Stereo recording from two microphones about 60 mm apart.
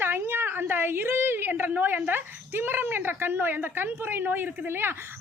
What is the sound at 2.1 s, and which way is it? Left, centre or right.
Speech, right.